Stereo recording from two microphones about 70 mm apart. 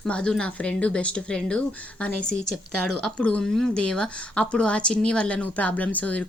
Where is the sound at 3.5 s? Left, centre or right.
Centre.